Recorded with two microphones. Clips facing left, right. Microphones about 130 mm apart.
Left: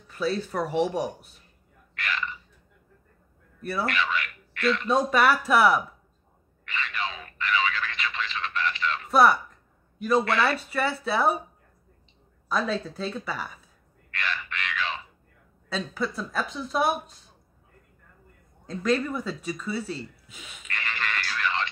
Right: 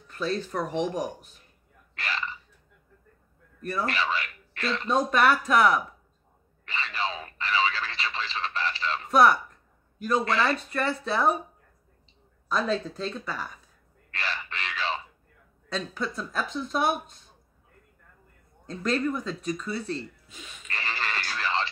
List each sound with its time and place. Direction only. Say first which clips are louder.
0.1 s speech: left 2 dB; 5° left (ahead or behind)
2.0 s hiccup: left 1 dB; 30° right (ahead or behind)
3.8 s speech: left 1 dB; 30° right (ahead or behind)
4.8 s speech: right 1 dB; 5° left (ahead or behind)
6.6 s a sound: right 1 dB; 30° right (ahead or behind)
9.1 s speech: even; centre (ahead or behind)
10.4 s speech: left 1 dB; 5° left (ahead or behind)
12.4 s speech: even; 5° left (ahead or behind)
14.1 s crow: left 2 dB; 30° right (ahead or behind)
15.7 s speech: left 2 dB; 5° left (ahead or behind)
18.7 s speech: left 2 dB; centre (ahead or behind)
20.6 s radio: even; 30° right (ahead or behind)